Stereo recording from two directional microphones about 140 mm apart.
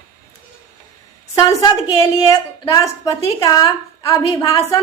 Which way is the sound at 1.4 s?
25° left (ahead or behind).